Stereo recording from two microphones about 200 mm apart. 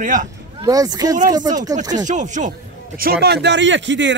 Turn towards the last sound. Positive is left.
turn(degrees=-65)  # may be behind; listen again after turning